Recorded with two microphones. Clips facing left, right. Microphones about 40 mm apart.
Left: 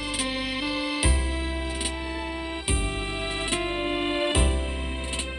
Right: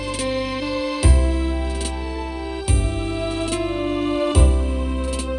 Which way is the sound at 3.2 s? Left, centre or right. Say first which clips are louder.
Right 5 dB; left.